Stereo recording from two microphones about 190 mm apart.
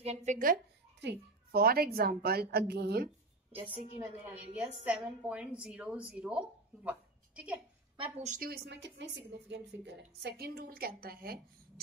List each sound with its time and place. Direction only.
0.0 s speech: 35° right (ahead or behind)
1.0 s a woman's voice: 55° right (ahead or behind)
4.6 s a woman's voice: 5° right (ahead or behind)
8.0 s speech: 40° right (ahead or behind)
8.5 s a woman's voice: 65° right (ahead or behind)